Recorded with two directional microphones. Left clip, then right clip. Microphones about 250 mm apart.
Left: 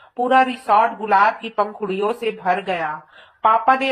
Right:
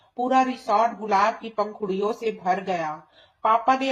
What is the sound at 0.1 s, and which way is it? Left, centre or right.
Speech, centre.